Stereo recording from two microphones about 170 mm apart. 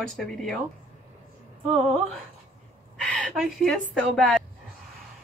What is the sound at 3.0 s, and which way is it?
Speech, 5° left (ahead or behind).